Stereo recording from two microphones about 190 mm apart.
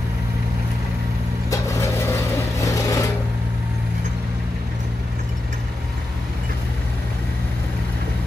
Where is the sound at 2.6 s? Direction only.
15° left (ahead or behind).